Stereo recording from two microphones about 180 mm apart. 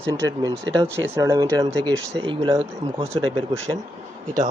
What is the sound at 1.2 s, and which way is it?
Speech, 20° right (ahead or behind).